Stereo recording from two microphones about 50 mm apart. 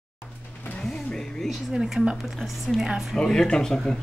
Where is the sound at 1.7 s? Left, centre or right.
Centre.